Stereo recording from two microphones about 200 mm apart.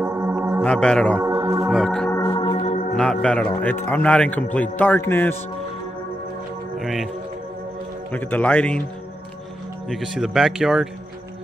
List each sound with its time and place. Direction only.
0.0 s music: 10° right (ahead or behind)
0.6 s speech: 5° left (ahead or behind)
1.2 s speech: 15° right (ahead or behind)
1.7 s speech: centre (ahead or behind)
2.1 s music: 20° left (ahead or behind)
2.7 s music: 40° left (ahead or behind)
3.0 s a man's voice: 5° left (ahead or behind)
6.8 s speech: centre (ahead or behind)
8.1 s a man's voice: 10° left (ahead or behind)
9.8 s speech: centre (ahead or behind)